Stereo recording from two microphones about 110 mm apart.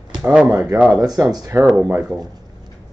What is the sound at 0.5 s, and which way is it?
Speech, 25° right (ahead or behind).